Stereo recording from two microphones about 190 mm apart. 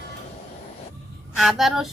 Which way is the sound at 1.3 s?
Centre (ahead or behind).